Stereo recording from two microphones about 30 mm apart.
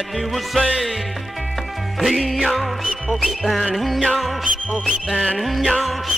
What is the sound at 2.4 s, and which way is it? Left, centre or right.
Music, centre.